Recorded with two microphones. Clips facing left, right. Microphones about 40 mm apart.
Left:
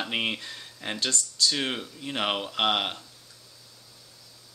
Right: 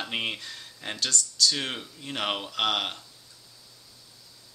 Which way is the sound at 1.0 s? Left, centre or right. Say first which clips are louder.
Right 1 dB; left.